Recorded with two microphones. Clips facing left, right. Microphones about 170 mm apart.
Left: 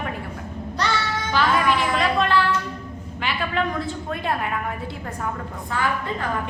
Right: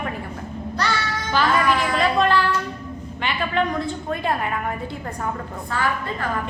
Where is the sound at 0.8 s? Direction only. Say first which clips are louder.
Even; 20° left (ahead or behind).